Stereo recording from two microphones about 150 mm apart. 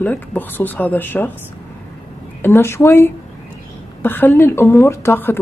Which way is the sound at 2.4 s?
15° left (ahead or behind).